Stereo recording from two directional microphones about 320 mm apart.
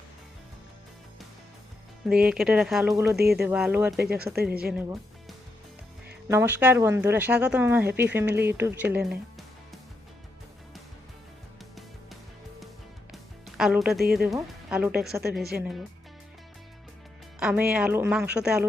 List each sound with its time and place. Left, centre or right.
2.0 s speech: centre
3.2 s speech: right
3.4 s speech: centre
6.2 s speech: centre
13.6 s speech: centre
17.4 s speech: centre